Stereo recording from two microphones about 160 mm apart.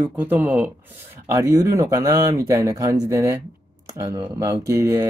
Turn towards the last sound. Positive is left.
turn(degrees=-20)  # may be behind; listen again after turning